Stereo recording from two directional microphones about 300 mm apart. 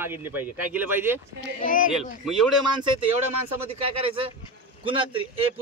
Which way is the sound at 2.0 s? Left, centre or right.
Centre.